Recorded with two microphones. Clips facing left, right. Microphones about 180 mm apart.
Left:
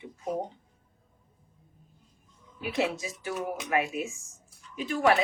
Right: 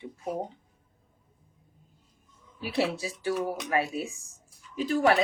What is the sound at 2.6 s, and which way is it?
Speech, 35° right (ahead or behind).